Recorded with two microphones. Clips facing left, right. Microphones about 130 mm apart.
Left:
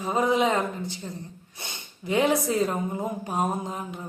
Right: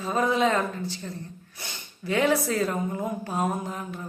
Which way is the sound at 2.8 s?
20° left (ahead or behind).